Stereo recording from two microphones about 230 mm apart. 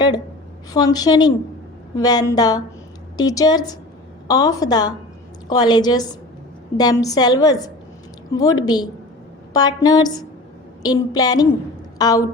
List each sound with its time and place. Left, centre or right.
0.7 s a woman's voice: centre